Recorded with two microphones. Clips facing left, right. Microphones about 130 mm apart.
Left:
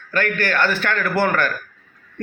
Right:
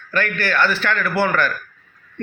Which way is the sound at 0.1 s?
45° left (ahead or behind).